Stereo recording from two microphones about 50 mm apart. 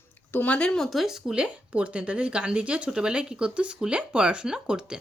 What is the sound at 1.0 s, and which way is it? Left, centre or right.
Speech, centre.